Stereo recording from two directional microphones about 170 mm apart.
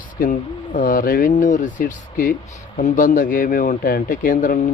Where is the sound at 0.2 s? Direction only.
55° left (ahead or behind).